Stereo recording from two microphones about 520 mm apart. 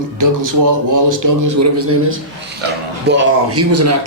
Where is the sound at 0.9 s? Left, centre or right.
Right.